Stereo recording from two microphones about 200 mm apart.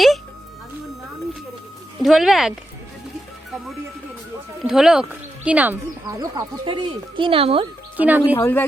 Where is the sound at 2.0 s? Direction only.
Centre (ahead or behind).